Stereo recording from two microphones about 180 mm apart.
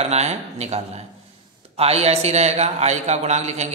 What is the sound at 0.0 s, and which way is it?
A man's voice, 35° right (ahead or behind).